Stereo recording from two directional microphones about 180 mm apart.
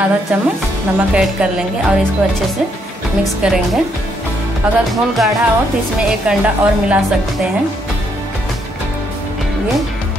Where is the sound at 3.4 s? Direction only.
5° right (ahead or behind).